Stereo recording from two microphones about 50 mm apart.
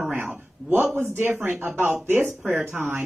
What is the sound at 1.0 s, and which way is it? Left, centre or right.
Speech, right.